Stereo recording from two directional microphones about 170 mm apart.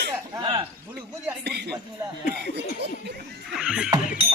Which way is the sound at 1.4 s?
80° right.